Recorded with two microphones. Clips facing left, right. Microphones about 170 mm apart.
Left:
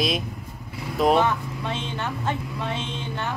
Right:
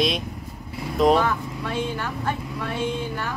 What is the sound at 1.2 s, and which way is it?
Speech, 20° left (ahead or behind).